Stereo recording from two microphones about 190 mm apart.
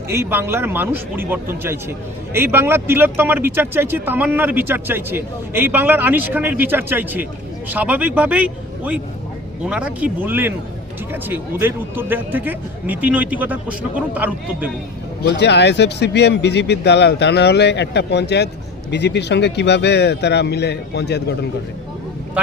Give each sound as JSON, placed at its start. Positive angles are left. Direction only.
{"t": 0.1, "sound": "speech", "side_deg": -10}
{"t": 15.2, "sound": "speech", "side_deg": 60}